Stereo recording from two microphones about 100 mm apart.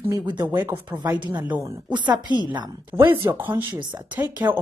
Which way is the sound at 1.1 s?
50° right (ahead or behind).